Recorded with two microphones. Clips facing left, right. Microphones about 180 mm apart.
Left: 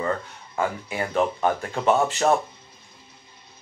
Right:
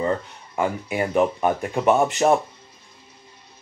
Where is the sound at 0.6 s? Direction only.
20° right (ahead or behind).